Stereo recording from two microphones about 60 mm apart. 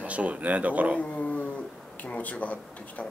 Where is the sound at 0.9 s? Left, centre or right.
Left.